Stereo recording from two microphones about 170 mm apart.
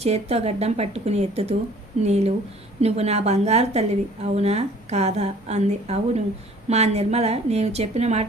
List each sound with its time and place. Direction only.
0.0 s a woman's voice: 40° right (ahead or behind)